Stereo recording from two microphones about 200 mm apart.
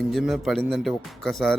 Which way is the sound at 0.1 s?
Centre (ahead or behind).